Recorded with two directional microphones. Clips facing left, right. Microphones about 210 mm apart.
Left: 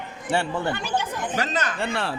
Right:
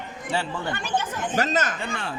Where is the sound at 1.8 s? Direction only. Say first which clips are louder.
Left 5 dB; 80° left.